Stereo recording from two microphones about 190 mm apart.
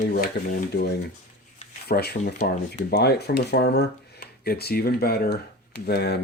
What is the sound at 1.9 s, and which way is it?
Speech, 55° left (ahead or behind).